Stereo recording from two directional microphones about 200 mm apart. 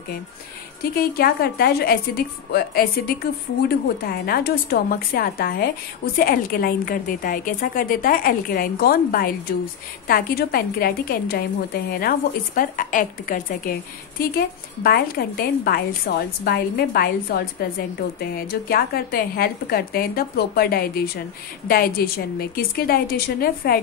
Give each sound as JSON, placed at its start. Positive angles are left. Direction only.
{"t": 0.9, "sound": "a woman's voice", "side_deg": 50}